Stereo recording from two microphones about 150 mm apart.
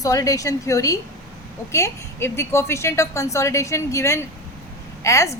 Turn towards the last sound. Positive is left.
turn(degrees=20)  # may be behind; listen again after turning